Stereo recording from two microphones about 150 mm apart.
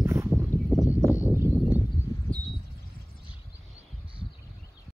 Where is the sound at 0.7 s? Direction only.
Centre (ahead or behind).